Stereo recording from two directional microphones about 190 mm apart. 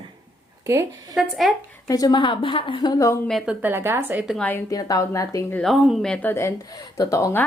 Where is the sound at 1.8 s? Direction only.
20° left (ahead or behind).